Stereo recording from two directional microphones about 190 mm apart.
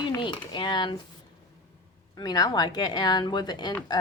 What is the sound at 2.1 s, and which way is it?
A woman's voice, 20° left (ahead or behind).